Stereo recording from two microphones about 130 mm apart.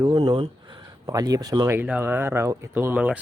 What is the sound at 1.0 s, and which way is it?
Speech, 30° right (ahead or behind).